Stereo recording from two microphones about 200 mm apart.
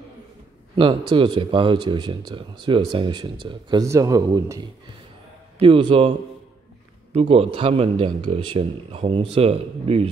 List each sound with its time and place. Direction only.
0.7 s speech: 25° right (ahead or behind)
5.6 s speech: 25° right (ahead or behind)
7.2 s speech: 30° right (ahead or behind)